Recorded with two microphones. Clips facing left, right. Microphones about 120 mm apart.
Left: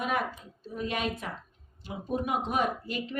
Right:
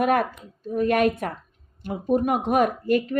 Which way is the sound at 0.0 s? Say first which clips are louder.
Right 9 dB; 55° right (ahead or behind).